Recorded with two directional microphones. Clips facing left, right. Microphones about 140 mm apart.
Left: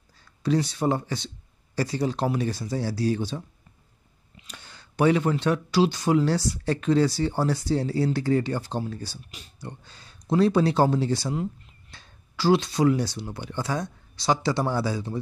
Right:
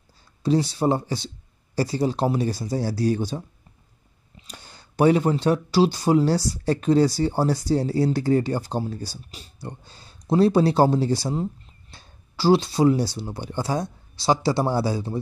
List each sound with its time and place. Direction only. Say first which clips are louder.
0.4 s speech: right 3 dB; 30° right (ahead or behind)